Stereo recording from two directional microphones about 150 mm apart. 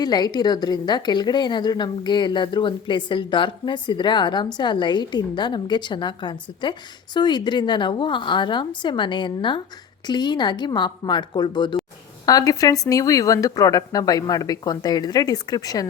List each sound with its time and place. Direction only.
0.0 s a woman's voice: 30° left (ahead or behind)